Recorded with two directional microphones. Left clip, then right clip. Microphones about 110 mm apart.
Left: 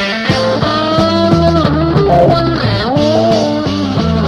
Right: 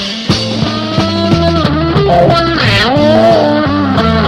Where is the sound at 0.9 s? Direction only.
40° right (ahead or behind).